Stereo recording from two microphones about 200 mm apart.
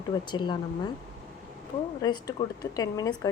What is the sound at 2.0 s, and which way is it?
A woman's voice, 20° left (ahead or behind).